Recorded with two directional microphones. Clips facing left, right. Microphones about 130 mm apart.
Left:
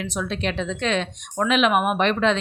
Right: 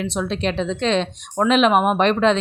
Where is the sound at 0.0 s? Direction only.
30° right (ahead or behind).